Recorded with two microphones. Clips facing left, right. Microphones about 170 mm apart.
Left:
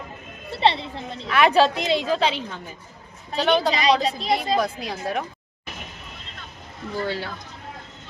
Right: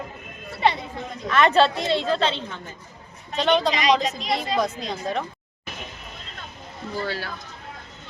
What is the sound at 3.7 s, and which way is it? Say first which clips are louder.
Speech: left 1 dB; 35° left (ahead or behind).